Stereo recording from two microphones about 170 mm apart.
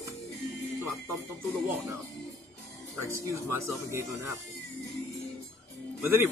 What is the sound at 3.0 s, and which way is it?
Speech, 20° right (ahead or behind).